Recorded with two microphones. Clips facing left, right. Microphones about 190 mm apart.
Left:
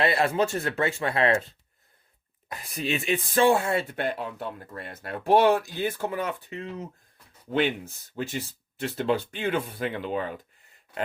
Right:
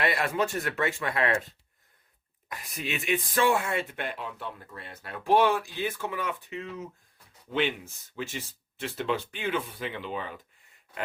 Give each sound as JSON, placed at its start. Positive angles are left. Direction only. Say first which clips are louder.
{"t": 0.0, "sound": "speech", "louder": "left 4 dB", "side_deg": 30}
{"t": 2.5, "sound": "speech", "louder": "left 5 dB", "side_deg": 30}
{"t": 8.1, "sound": "speech", "louder": "left 4 dB", "side_deg": 40}